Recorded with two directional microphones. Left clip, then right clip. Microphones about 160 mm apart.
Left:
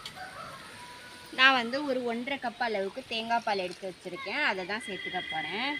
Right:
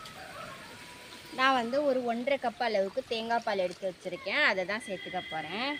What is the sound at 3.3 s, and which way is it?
Speech, 35° right (ahead or behind).